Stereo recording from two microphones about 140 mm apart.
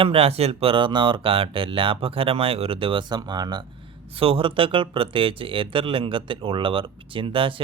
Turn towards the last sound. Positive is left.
turn(degrees=-40)  # may be behind; listen again after turning